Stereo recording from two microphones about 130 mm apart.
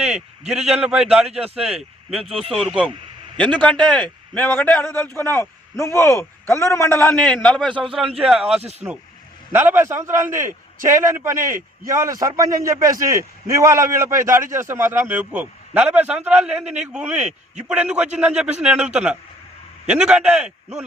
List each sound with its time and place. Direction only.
0.0 s a man's voice: 5° right (ahead or behind); by 7.2 s 20° left (ahead or behind)
7.2 s a man's voice: 5° left (ahead or behind)
9.5 s a man's voice: 15° right (ahead or behind)
17.2 s speech: 65° right (ahead or behind)
17.7 s a man's voice: 10° right (ahead or behind)
19.9 s a man's voice: 5° right (ahead or behind)